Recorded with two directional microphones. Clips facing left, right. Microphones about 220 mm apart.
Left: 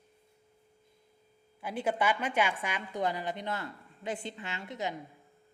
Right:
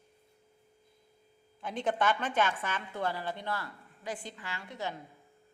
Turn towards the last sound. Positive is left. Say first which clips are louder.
# left 2 dB
turn(degrees=20)  # may be behind; listen again after turning